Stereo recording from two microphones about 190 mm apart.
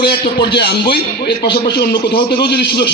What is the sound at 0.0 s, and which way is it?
Speech, 60° left (ahead or behind).